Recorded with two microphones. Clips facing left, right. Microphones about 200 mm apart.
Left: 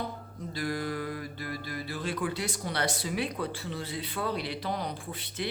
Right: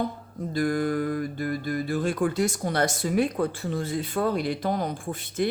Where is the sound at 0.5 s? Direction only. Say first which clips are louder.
Right 8 dB; 50° right (ahead or behind).